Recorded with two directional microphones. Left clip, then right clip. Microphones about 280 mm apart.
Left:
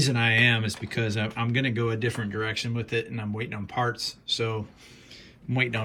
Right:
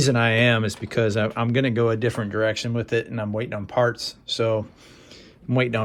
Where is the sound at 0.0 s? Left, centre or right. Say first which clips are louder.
Right 3 dB; centre.